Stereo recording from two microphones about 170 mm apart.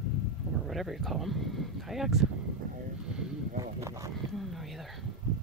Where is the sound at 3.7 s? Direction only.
20° right (ahead or behind).